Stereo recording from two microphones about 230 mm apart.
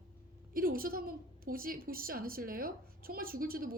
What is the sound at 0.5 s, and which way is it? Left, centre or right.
A woman's voice, right.